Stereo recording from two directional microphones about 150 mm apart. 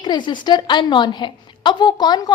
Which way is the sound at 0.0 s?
30° left (ahead or behind).